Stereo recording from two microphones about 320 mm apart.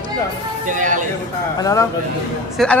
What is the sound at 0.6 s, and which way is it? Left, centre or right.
Speech, right.